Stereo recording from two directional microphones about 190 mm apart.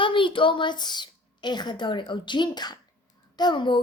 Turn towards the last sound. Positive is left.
turn(degrees=25)  # may be behind; listen again after turning